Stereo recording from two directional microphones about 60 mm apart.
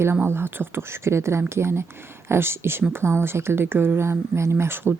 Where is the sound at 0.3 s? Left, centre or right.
Right.